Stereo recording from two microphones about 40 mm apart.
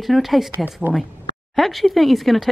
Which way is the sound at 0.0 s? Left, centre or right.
Centre.